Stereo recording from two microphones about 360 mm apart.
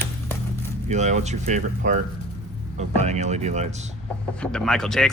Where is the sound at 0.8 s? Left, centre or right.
Centre.